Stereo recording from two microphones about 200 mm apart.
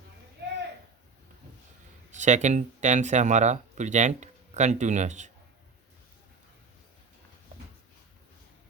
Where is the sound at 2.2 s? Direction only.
35° right (ahead or behind).